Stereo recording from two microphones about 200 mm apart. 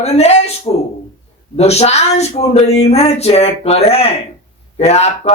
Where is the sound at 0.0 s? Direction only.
30° left (ahead or behind).